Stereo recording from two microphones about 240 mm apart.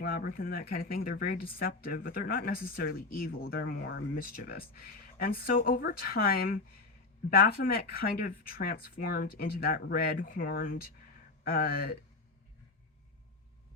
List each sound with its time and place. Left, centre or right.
0.0 s speech: left